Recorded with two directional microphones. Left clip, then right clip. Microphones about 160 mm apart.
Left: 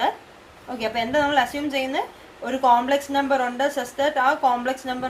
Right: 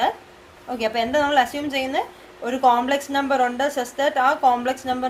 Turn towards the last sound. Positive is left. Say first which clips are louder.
# right 3 dB
turn(degrees=-45)  # may be behind; listen again after turning